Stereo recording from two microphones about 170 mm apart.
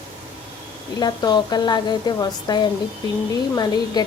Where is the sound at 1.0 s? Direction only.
25° left (ahead or behind).